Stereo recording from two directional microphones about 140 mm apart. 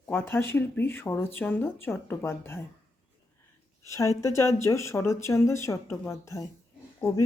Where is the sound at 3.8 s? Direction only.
20° left (ahead or behind).